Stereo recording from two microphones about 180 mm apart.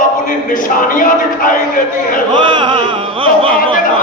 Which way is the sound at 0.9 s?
50° left (ahead or behind).